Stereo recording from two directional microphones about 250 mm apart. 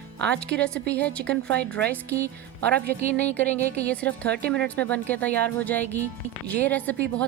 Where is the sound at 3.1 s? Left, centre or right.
Centre.